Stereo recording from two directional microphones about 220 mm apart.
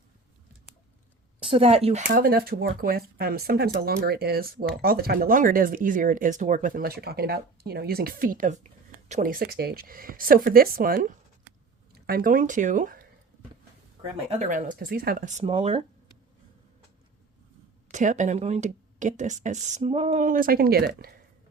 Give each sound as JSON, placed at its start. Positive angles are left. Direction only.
{"t": 1.4, "sound": "speech", "side_deg": -25}
{"t": 14.3, "sound": "speech", "side_deg": -35}
{"t": 17.9, "sound": "speech", "side_deg": -35}